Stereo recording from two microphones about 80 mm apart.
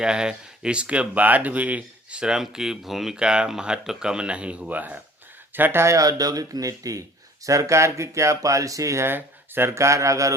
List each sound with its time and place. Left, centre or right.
0.0 s speech: centre; by 9.0 s right
9.0 s speech: right